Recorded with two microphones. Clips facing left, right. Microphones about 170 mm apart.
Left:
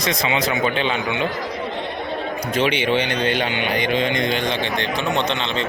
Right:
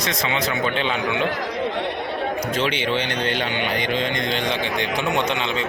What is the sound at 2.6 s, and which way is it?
Speech, 15° left (ahead or behind).